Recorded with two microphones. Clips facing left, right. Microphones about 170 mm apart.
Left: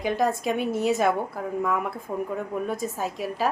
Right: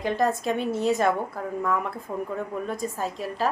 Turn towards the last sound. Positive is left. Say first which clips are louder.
# left 1 dB
turn(degrees=5)  # may be behind; listen again after turning